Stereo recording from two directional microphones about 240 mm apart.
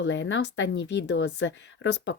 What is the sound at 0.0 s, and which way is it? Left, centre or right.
A woman's voice, left.